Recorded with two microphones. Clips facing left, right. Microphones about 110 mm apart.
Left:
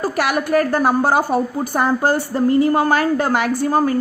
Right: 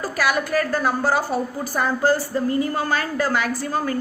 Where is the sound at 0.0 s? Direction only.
60° left (ahead or behind).